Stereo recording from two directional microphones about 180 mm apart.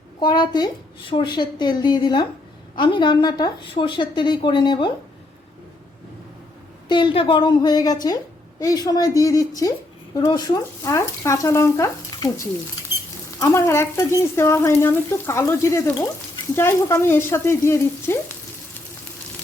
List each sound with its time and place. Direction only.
0.2 s a woman's voice: 25° left (ahead or behind)
6.8 s a woman's voice: 25° left (ahead or behind)